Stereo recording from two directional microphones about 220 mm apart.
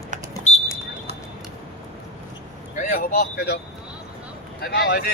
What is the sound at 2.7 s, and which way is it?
Vehicle, 35° left (ahead or behind).